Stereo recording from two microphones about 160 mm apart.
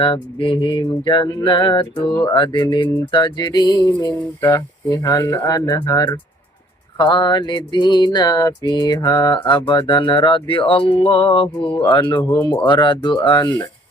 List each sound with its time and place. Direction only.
0.0 s speech: 35° left (ahead or behind)
2.2 s music: 30° left (ahead or behind)
9.5 s speech: 30° left (ahead or behind)
12.2 s speech: 15° left (ahead or behind)
12.5 s music: 30° left (ahead or behind)